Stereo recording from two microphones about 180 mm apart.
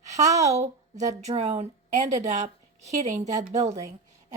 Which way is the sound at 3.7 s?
20° right (ahead or behind).